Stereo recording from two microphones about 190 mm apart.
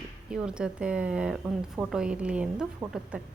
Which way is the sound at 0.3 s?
5° right (ahead or behind).